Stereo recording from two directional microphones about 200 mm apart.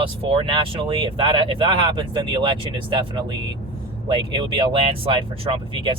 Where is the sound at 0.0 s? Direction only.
25° right (ahead or behind).